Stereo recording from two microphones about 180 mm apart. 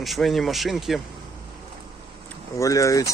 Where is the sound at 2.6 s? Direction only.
15° left (ahead or behind).